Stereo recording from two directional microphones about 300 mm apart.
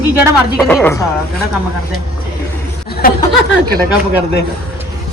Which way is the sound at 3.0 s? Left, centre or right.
Left.